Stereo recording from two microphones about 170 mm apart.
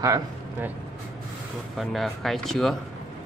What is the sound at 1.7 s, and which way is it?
A man's voice, centre (ahead or behind).